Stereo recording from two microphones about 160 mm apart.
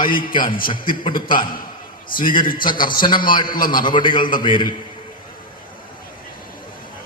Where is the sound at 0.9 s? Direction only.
30° left (ahead or behind).